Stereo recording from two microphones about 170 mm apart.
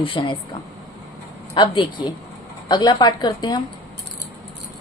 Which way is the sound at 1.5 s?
30° left (ahead or behind).